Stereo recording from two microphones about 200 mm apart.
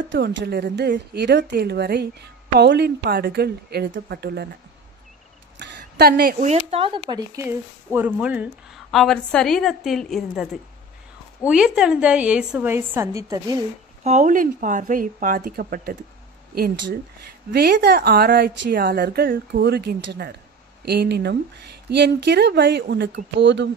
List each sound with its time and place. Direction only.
0.1 s speech: 60° right (ahead or behind)
5.6 s a sound: 60° right (ahead or behind)
6.4 s a woman's voice: 30° right (ahead or behind); by 13.6 s 15° right (ahead or behind)
14.0 s a woman's voice: 40° right (ahead or behind); by 23.7 s 60° right (ahead or behind)